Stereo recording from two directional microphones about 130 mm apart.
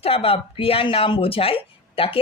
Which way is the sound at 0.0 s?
45° left (ahead or behind).